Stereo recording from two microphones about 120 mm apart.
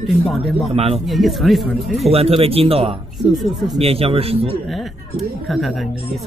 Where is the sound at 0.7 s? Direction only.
55° right (ahead or behind).